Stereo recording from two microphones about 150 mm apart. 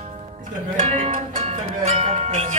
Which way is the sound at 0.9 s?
45° right (ahead or behind).